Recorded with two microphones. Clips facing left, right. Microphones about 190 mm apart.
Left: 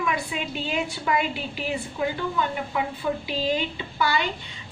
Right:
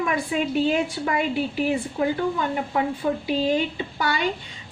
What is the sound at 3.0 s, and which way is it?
Speech, 45° right (ahead or behind).